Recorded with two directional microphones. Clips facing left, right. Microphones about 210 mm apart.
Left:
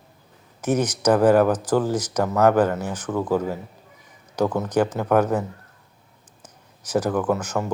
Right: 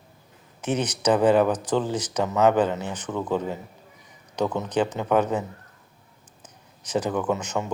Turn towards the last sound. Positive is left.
turn(degrees=5)  # may be behind; listen again after turning